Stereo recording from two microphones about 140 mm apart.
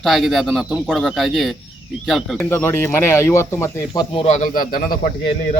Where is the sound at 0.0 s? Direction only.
Centre (ahead or behind).